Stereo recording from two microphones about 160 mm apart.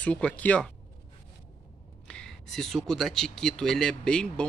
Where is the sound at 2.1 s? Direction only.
5° left (ahead or behind).